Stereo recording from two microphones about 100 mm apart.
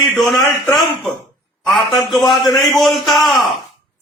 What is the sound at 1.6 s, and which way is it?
Speech, 5° left (ahead or behind).